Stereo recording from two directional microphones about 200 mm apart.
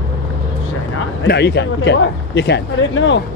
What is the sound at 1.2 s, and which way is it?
Speech, 60° left (ahead or behind).